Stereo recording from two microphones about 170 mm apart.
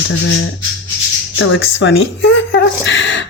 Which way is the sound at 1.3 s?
90° left.